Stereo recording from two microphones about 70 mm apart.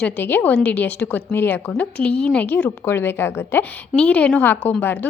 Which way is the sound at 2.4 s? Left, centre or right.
Left.